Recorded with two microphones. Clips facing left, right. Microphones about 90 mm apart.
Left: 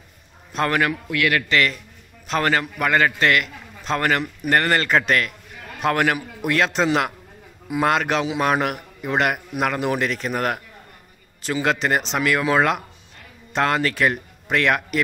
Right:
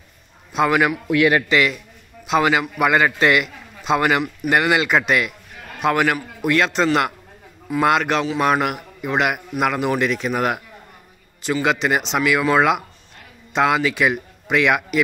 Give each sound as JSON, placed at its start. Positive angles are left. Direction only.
{"t": 0.5, "sound": "a man's voice", "side_deg": -10}
{"t": 1.0, "sound": "a man's voice", "side_deg": -20}